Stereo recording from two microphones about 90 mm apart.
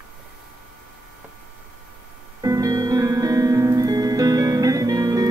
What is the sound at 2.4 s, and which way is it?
Music, 40° right (ahead or behind).